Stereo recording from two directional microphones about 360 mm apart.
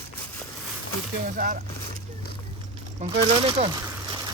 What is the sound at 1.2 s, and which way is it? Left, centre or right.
Speech, right.